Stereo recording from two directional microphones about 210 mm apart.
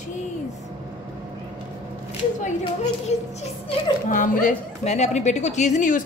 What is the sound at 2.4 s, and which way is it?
A woman's voice, 35° left (ahead or behind).